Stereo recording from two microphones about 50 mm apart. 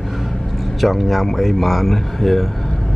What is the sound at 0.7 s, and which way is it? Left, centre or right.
Speech, centre.